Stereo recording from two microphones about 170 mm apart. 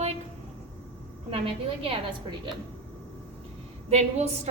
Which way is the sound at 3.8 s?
40° right (ahead or behind).